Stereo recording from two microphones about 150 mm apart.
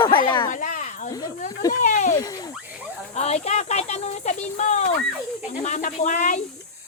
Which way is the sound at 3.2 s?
45° left (ahead or behind).